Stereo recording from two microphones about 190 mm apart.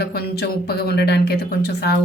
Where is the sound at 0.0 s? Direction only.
55° left (ahead or behind).